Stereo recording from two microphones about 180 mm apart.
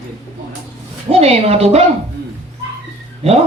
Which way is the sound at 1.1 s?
35° right (ahead or behind).